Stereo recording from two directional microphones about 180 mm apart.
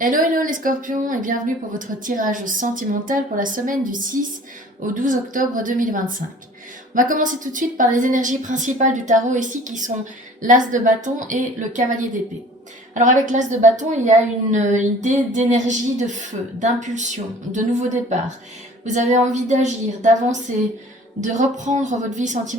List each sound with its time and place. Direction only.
0.0 s a woman's voice: 50° right (ahead or behind)